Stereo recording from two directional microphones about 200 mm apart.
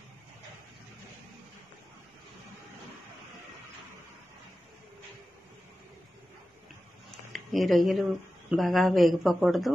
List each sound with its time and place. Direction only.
7.3 s speech: centre (ahead or behind)